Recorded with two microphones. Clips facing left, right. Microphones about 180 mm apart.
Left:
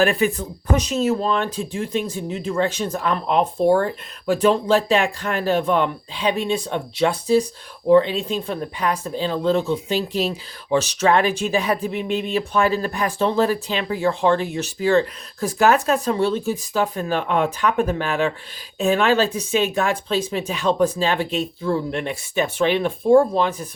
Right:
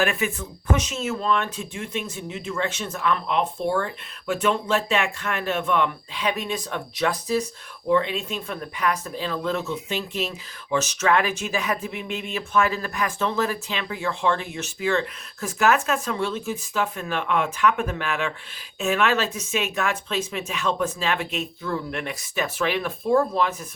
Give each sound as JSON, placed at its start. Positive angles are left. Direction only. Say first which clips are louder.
{"t": 0.0, "sound": "speech", "louder": "left 6 dB", "side_deg": 35}